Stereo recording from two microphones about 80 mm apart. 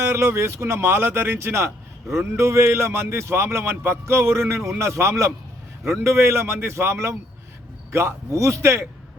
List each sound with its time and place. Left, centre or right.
0.0 s a man's voice: right